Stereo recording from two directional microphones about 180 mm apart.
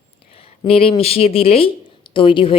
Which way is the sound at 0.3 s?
30° left (ahead or behind).